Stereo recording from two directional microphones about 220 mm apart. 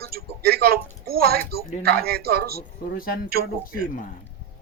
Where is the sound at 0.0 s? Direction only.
45° right (ahead or behind).